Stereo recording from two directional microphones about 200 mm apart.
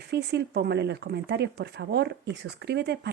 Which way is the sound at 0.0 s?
55° right (ahead or behind).